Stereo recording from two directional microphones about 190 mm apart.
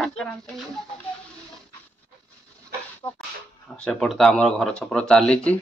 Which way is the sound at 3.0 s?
20° left (ahead or behind).